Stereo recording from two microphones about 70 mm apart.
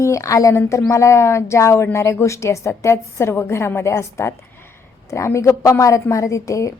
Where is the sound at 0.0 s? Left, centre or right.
Left.